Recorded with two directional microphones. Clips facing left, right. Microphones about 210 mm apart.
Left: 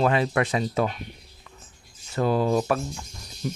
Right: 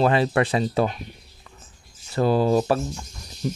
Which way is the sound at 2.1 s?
30° right (ahead or behind).